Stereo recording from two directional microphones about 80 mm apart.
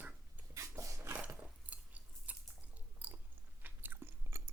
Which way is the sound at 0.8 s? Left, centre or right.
Right.